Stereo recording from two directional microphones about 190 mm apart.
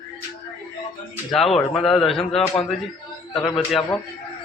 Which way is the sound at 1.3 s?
Centre (ahead or behind).